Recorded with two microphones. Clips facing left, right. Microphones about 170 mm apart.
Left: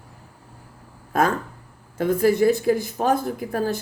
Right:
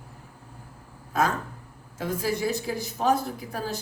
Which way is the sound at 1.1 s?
55° left (ahead or behind).